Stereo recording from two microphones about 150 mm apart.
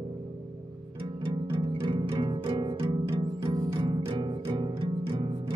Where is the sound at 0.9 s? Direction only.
35° right (ahead or behind).